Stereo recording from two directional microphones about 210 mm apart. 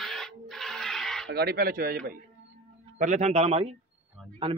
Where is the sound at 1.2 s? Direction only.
50° right (ahead or behind).